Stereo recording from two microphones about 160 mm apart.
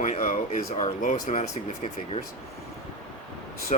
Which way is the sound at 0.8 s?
45° left (ahead or behind).